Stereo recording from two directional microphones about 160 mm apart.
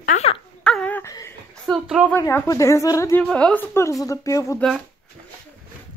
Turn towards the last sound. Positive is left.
turn(degrees=20)  # may be behind; listen again after turning